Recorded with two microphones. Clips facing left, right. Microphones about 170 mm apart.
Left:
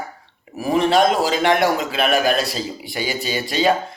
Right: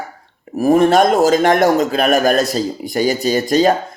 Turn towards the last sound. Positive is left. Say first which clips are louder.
# right 6 dB
turn(degrees=-45)  # may be behind; listen again after turning